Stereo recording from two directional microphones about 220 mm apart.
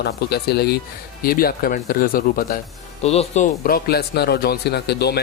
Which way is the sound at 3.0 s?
30° left (ahead or behind).